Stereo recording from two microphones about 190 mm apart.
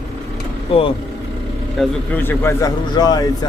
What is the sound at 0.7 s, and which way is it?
Speech, 30° left (ahead or behind).